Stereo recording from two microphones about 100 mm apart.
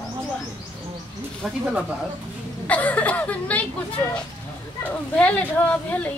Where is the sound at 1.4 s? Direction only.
Centre (ahead or behind).